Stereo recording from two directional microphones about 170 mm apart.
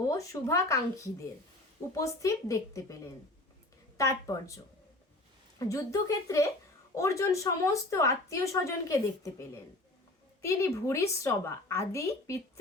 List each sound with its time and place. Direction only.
0.1 s a woman's voice: 20° left (ahead or behind)